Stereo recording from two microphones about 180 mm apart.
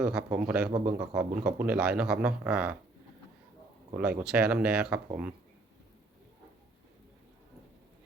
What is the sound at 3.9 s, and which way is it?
Speech, 5° right (ahead or behind).